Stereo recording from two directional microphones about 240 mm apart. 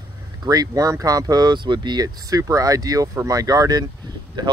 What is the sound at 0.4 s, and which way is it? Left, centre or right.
Speech, centre.